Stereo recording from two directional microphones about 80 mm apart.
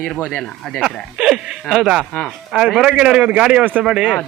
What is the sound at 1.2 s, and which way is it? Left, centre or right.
A man's voice, centre.